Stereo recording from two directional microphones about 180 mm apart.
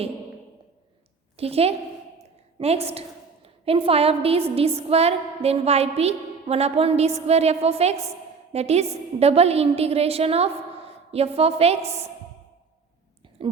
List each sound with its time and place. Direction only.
1.4 s a woman's voice: 35° right (ahead or behind)